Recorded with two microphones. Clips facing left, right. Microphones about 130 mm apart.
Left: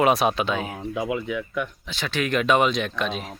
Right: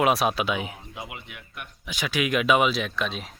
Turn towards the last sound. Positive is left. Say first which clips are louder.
# left 3 dB
turn(degrees=0)  # may be behind; listen again after turning